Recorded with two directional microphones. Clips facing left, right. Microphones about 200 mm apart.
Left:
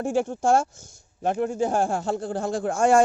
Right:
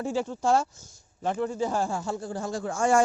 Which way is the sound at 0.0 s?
50° left (ahead or behind).